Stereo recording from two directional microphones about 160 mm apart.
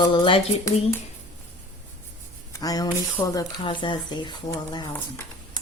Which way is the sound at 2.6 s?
25° left (ahead or behind).